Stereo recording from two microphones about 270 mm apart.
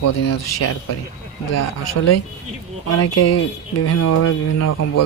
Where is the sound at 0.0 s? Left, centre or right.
Left.